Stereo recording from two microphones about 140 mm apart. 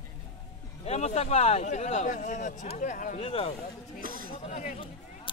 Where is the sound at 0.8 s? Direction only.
50° left (ahead or behind).